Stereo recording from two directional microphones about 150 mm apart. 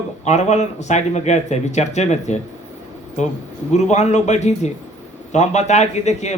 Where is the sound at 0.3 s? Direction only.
50° left (ahead or behind).